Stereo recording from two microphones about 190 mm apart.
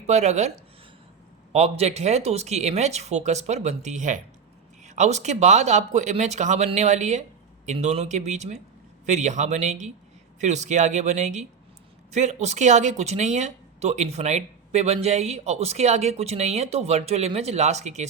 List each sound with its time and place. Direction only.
0.1 s speech: 35° right (ahead or behind)
1.5 s speech: 35° right (ahead or behind)